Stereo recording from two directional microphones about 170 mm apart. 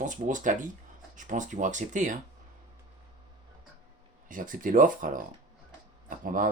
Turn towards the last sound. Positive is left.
turn(degrees=-50)  # may be behind; listen again after turning